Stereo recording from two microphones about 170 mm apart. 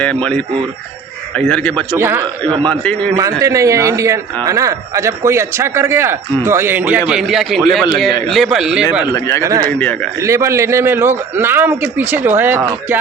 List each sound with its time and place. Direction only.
0.0 s speech: 5° left (ahead or behind)
2.0 s a man's voice: 15° right (ahead or behind)
9.1 s speech: 20° left (ahead or behind)
9.4 s speech: 20° right (ahead or behind)
9.6 s speech: 10° left (ahead or behind)
10.2 s a man's voice: 15° right (ahead or behind)